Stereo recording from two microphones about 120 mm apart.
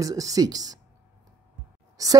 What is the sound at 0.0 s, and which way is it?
Speech, 30° right (ahead or behind).